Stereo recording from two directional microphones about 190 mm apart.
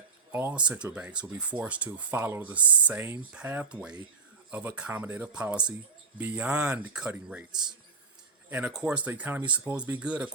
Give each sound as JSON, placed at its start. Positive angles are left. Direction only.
{"t": 0.3, "sound": "speech", "side_deg": -10}
{"t": 8.4, "sound": "speech", "side_deg": -5}